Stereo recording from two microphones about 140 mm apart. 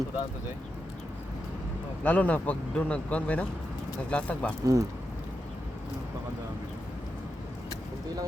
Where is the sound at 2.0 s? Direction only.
10° left (ahead or behind).